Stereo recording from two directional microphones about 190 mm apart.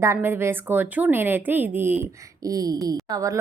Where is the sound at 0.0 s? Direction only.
15° right (ahead or behind).